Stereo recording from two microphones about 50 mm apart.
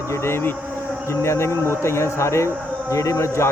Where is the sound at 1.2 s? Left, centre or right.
Left.